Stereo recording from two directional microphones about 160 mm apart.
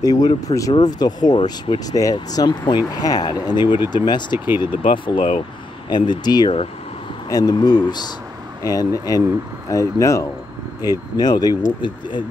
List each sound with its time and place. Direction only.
0.0 s speech: 25° left (ahead or behind)